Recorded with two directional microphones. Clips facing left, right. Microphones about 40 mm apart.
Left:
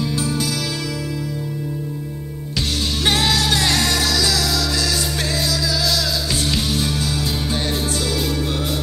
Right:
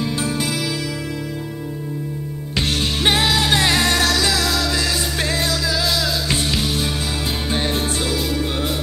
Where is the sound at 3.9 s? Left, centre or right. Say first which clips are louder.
Right 2 dB; right.